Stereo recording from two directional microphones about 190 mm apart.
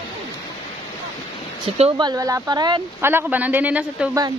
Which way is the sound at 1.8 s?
25° right (ahead or behind).